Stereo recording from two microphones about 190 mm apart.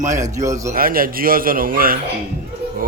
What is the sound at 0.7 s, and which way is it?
Speech, 50° right (ahead or behind).